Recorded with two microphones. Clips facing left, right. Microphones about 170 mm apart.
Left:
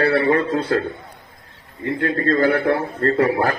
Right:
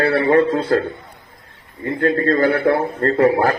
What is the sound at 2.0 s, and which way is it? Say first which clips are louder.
A man's voice: right 2 dB; 40° right (ahead or behind).